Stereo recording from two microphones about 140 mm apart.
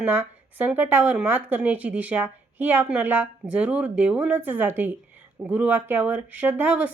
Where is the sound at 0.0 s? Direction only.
15° right (ahead or behind).